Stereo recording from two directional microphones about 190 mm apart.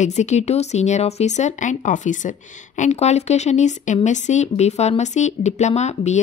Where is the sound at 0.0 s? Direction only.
35° left (ahead or behind).